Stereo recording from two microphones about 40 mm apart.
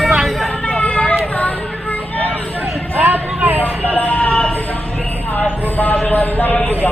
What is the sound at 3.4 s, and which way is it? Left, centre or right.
Vehicle, right.